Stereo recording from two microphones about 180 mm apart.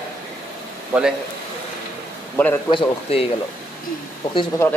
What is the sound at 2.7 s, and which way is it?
Speech, 30° left (ahead or behind).